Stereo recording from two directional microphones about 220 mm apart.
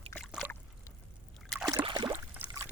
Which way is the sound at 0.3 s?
5° right (ahead or behind).